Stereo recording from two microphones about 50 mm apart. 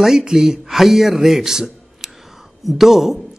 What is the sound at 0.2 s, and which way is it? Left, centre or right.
A man's voice, centre.